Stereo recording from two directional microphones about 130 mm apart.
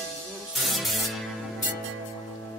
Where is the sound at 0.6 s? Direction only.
Centre (ahead or behind).